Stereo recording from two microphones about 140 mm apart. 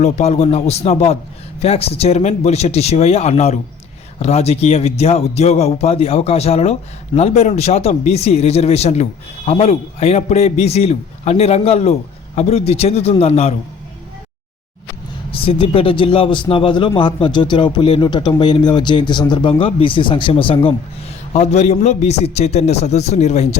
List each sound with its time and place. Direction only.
0.0 s speech: 50° left (ahead or behind)
15.3 s speech: 40° left (ahead or behind)
21.3 s speech: 50° left (ahead or behind)